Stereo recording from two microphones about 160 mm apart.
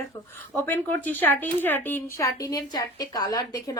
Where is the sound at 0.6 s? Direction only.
10° left (ahead or behind).